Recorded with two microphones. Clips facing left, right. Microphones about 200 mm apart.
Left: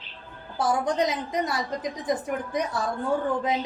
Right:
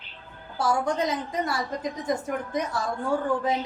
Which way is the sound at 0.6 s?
20° left (ahead or behind).